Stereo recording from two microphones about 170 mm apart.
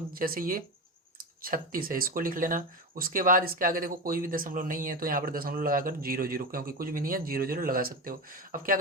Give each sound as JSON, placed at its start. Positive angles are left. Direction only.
{"t": 0.1, "sound": "speech", "side_deg": -60}